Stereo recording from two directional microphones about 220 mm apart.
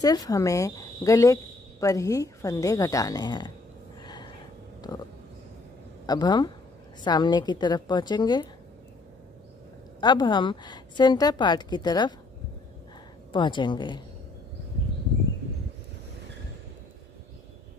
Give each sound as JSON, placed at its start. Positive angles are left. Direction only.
{"t": 0.0, "sound": "speech", "side_deg": 15}
{"t": 4.0, "sound": "a sound", "side_deg": 20}
{"t": 6.0, "sound": "a woman's voice", "side_deg": 20}
{"t": 9.9, "sound": "a woman's voice", "side_deg": 20}
{"t": 13.3, "sound": "a woman's voice", "side_deg": 20}